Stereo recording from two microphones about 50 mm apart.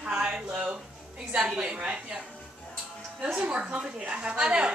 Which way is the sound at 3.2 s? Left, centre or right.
Centre.